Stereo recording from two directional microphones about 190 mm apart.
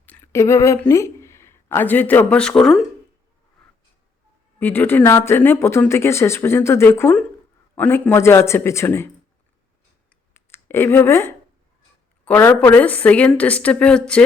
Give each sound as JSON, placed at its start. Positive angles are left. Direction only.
{"t": 0.0, "sound": "speech", "side_deg": 10}
{"t": 4.6, "sound": "speech", "side_deg": 10}
{"t": 10.3, "sound": "speech", "side_deg": 10}